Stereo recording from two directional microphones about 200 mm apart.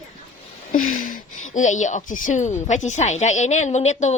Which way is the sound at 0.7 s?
40° left (ahead or behind).